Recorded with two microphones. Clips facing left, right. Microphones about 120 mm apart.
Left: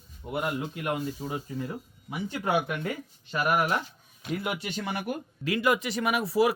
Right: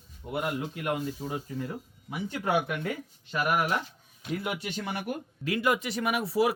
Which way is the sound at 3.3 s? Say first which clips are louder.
Left 1 dB; 35° left (ahead or behind).